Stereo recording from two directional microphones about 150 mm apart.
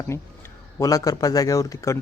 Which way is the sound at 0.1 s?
15° left (ahead or behind).